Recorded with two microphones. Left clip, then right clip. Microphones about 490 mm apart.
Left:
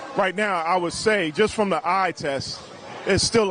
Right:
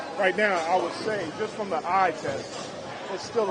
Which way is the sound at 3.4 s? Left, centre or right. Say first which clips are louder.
Left 2 dB; left.